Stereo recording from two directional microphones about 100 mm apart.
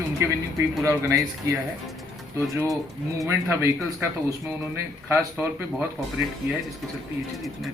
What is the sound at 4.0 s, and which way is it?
Music, 35° right (ahead or behind).